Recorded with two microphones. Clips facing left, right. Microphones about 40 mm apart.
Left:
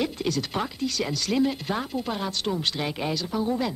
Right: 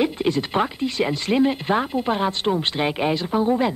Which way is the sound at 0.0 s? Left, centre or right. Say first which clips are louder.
Right 6 dB; right.